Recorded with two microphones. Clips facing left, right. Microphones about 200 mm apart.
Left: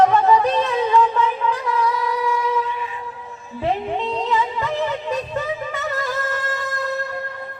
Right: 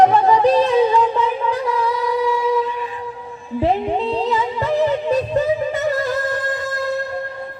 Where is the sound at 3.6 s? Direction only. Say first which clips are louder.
Right 4 dB; 35° right (ahead or behind).